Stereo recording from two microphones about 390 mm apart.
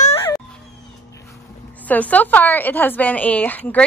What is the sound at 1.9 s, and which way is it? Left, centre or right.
A woman's voice, centre.